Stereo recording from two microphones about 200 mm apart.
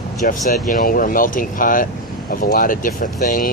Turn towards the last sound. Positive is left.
turn(degrees=40)  # may be behind; listen again after turning